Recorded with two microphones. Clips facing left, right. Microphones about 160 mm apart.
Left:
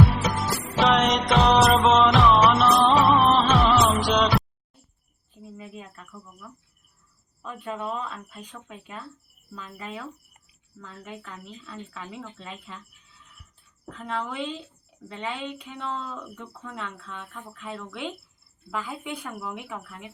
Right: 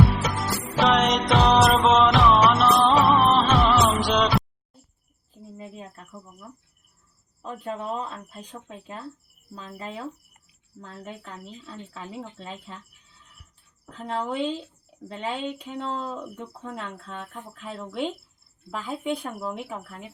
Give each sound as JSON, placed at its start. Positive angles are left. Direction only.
{"t": 0.2, "sound": "music", "side_deg": 0}
{"t": 5.5, "sound": "a sound", "side_deg": -35}
{"t": 7.4, "sound": "speech", "side_deg": -35}
{"t": 13.9, "sound": "speech", "side_deg": -30}
{"t": 16.6, "sound": "speech", "side_deg": -40}
{"t": 19.4, "sound": "speech", "side_deg": -35}